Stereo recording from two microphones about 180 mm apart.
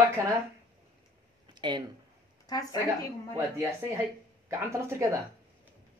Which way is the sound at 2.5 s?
20° left (ahead or behind).